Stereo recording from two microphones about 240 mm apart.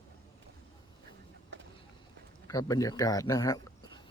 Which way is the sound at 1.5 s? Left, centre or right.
Right.